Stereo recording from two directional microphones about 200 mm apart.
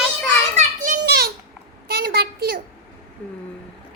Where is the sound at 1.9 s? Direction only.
50° right (ahead or behind).